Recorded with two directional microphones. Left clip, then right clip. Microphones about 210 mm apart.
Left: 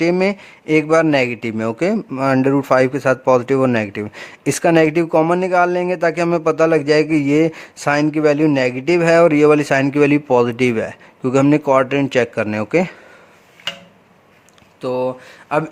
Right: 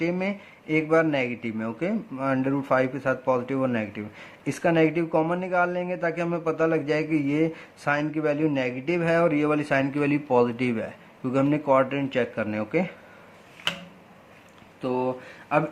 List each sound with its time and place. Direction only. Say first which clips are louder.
0.0 s speech: left 11 dB; 50° left (ahead or behind)
14.8 s speech: left 7 dB; 55° left (ahead or behind)